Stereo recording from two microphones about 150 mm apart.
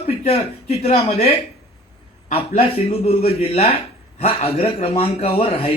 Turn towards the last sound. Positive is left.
turn(degrees=40)  # may be behind; listen again after turning